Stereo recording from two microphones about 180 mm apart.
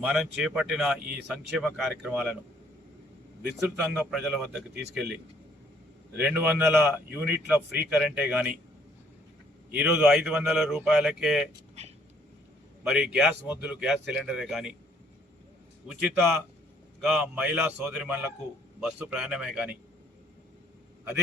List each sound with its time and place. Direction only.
0.0 s speech: centre (ahead or behind)
3.6 s speech: 5° right (ahead or behind)
4.7 s a man's voice: 65° right (ahead or behind)
6.1 s speech: 10° right (ahead or behind)
9.7 s speech: 5° right (ahead or behind)
12.8 s speech: 5° right (ahead or behind)
15.9 s speech: centre (ahead or behind)